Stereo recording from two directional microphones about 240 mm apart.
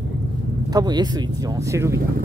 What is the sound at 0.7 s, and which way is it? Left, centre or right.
Speech, centre.